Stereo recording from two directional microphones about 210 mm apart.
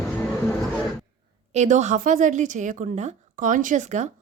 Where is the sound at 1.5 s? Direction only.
35° right (ahead or behind).